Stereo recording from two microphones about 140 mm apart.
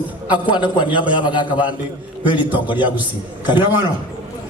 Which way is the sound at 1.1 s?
35° left (ahead or behind).